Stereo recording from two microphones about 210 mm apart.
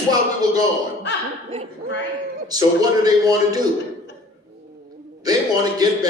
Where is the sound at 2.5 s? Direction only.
20° right (ahead or behind).